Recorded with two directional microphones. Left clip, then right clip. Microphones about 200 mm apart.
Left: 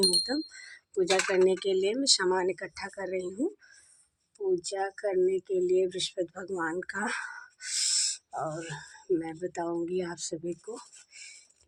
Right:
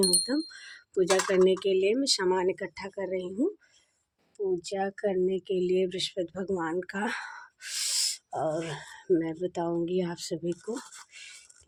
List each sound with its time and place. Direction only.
0.0 s speech: 35° right (ahead or behind)
11.1 s whispering: 40° right (ahead or behind)